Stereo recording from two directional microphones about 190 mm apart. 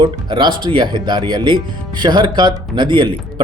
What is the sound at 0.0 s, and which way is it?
Speech, 25° right (ahead or behind).